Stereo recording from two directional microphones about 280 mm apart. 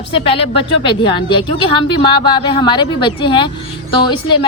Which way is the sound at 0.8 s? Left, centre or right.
Centre.